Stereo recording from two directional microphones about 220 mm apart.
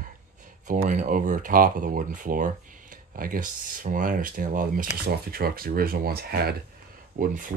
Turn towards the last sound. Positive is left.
turn(degrees=-35)  # may be behind; listen again after turning